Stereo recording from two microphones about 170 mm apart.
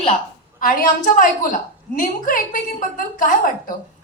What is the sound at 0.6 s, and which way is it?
A woman's voice, 55° left (ahead or behind).